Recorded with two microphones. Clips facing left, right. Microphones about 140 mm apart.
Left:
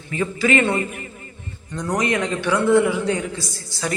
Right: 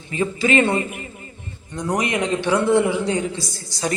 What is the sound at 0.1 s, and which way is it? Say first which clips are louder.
A man's voice: even; 25° right (ahead or behind).